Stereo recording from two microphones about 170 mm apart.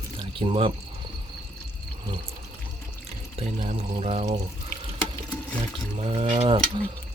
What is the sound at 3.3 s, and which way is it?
Speech, 40° right (ahead or behind).